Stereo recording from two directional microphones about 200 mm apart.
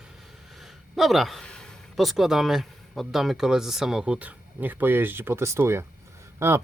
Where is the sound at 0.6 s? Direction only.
Centre (ahead or behind).